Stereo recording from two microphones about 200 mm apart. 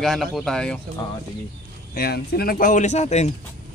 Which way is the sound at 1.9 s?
50° left (ahead or behind).